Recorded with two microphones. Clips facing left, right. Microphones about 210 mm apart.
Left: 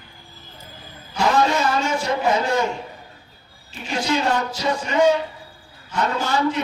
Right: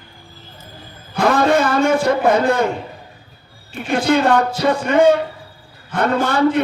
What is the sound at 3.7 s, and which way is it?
A man's voice, 55° right (ahead or behind).